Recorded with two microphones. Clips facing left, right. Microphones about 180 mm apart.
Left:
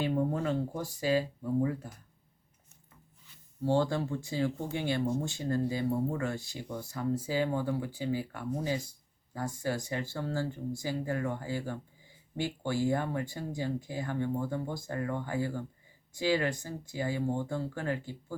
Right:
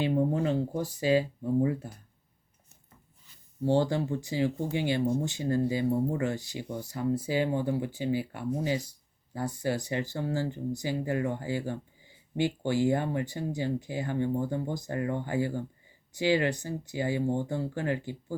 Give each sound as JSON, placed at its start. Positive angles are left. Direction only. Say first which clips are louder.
{"t": 0.0, "sound": "a sound", "louder": "right 3 dB", "side_deg": -20}
{"t": 0.8, "sound": "speech", "louder": "right 5 dB", "side_deg": -20}
{"t": 3.7, "sound": "speech", "louder": "right 2 dB", "side_deg": -20}